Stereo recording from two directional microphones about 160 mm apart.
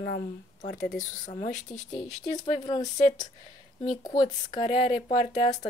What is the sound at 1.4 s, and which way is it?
Speech, 50° left (ahead or behind).